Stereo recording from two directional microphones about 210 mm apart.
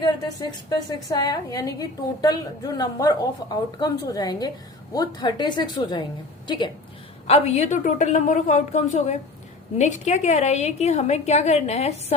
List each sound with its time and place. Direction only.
0.0 s a woman's voice: 20° left (ahead or behind)
7.3 s a woman's voice: 30° left (ahead or behind)